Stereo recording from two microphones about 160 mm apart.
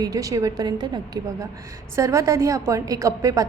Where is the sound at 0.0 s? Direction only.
20° right (ahead or behind).